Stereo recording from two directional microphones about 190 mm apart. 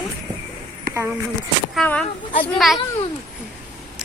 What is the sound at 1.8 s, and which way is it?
Speech, 5° left (ahead or behind).